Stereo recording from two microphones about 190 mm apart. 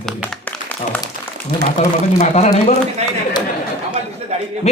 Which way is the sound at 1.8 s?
40° left (ahead or behind).